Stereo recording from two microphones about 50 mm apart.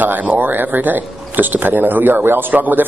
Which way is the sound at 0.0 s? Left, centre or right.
Right.